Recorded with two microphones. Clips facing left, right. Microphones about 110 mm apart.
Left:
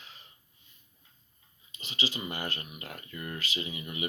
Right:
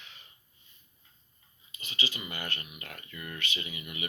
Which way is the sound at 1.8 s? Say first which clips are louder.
Left 3 dB; 30° left (ahead or behind).